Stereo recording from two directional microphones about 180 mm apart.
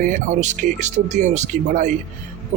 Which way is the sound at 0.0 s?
45° right (ahead or behind).